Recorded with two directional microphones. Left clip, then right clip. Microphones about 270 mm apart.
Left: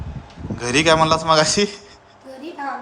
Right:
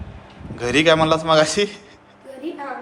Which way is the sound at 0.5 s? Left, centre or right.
Centre.